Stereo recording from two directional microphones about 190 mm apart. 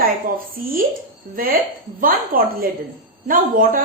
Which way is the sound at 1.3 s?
50° right (ahead or behind).